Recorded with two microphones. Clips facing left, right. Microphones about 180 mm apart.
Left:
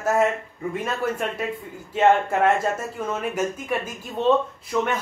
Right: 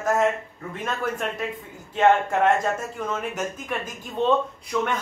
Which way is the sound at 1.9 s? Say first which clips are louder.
Left 1 dB; 5° left (ahead or behind).